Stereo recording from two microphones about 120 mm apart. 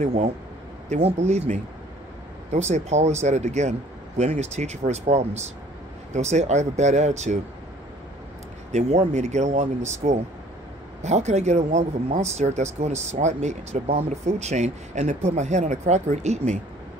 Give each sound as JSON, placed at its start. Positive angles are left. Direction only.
{"t": 0.0, "sound": "speech", "side_deg": -70}
{"t": 8.7, "sound": "speech", "side_deg": -70}